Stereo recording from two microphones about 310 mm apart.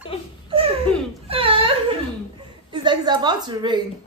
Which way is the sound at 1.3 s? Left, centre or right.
Centre.